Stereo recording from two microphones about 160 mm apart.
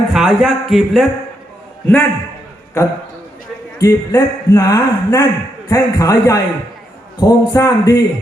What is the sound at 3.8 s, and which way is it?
A man's voice, 20° left (ahead or behind).